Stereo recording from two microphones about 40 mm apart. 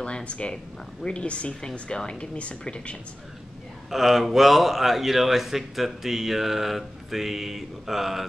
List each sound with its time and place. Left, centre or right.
0.0 s a sound: left
1.0 s speech: left
3.9 s a man's voice: centre